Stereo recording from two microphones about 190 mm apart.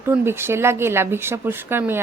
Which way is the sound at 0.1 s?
10° right (ahead or behind).